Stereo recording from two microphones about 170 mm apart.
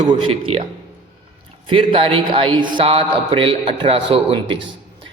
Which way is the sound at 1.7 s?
30° right (ahead or behind).